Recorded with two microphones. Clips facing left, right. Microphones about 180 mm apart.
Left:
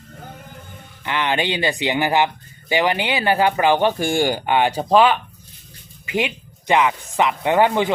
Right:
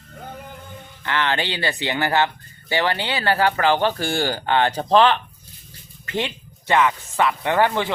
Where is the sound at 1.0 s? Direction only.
15° left (ahead or behind).